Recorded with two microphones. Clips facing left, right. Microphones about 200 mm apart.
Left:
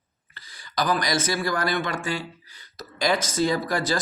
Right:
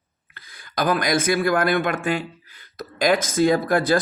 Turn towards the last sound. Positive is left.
turn(degrees=-55)  # may be behind; listen again after turning